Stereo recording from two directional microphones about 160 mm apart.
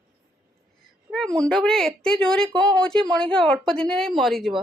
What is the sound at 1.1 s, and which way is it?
Speech, 5° left (ahead or behind).